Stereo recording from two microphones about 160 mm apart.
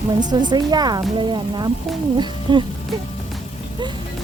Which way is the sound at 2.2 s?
30° right (ahead or behind).